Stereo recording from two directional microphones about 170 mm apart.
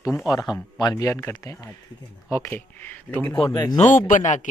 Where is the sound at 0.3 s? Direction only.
20° left (ahead or behind).